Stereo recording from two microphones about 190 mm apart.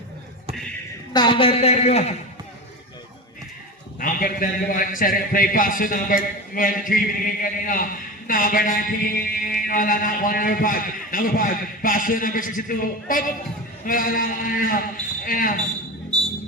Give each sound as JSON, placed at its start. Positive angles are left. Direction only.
{"t": 1.1, "sound": "a woman's voice", "side_deg": 25}
{"t": 4.0, "sound": "a man's voice", "side_deg": 45}